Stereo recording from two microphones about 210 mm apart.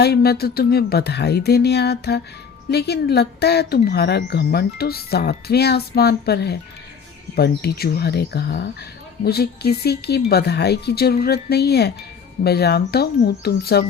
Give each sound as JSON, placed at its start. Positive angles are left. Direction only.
{"t": 0.0, "sound": "speech", "side_deg": 50}